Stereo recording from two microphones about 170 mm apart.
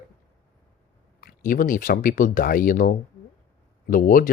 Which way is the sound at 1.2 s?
55° left (ahead or behind).